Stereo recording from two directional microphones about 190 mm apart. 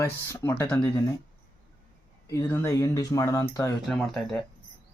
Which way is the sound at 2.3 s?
15° left (ahead or behind).